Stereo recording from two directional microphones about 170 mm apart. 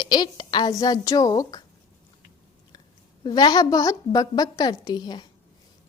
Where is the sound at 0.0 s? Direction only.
25° left (ahead or behind).